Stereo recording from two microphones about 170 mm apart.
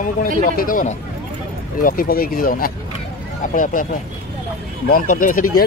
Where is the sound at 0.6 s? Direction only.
55° left (ahead or behind).